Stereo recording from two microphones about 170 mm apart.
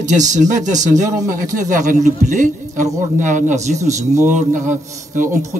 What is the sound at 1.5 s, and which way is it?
Speech, 50° right (ahead or behind).